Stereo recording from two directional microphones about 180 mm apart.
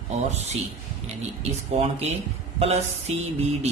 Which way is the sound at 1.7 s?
35° right (ahead or behind).